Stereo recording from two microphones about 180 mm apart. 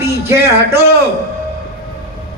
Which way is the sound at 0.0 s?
15° right (ahead or behind).